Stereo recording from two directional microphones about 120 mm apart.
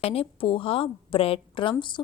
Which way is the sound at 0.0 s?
55° left (ahead or behind).